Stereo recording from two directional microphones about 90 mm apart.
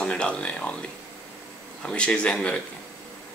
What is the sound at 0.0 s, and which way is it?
Speech, 10° left (ahead or behind).